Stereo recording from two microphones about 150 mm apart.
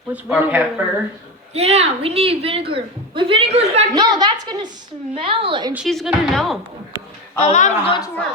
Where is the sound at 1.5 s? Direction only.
45° right (ahead or behind).